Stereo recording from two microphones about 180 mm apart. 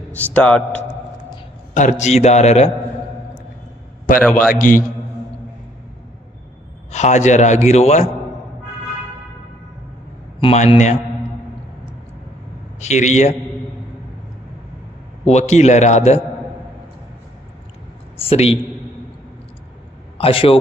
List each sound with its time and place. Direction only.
0.1 s a man's voice: 10° left (ahead or behind)
1.7 s a man's voice: 45° left (ahead or behind)
4.4 s a man's voice: 50° left (ahead or behind)
6.9 s a man's voice: 40° left (ahead or behind)
10.4 s a man's voice: 35° left (ahead or behind)
12.8 s a man's voice: 40° left (ahead or behind)
15.2 s a man's voice: 40° left (ahead or behind)
18.2 s a man's voice: 35° left (ahead or behind)
20.2 s a man's voice: 30° left (ahead or behind)